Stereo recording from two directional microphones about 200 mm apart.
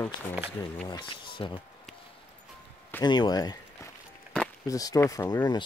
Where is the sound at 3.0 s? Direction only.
20° left (ahead or behind).